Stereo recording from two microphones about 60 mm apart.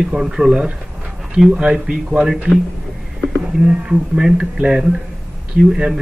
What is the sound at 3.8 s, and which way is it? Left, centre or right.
Speech, centre.